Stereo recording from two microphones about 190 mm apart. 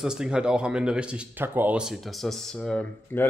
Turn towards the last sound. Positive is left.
turn(degrees=10)  # may be behind; listen again after turning